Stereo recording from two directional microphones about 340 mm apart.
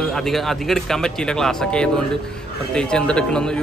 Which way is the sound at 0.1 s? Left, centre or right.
Centre.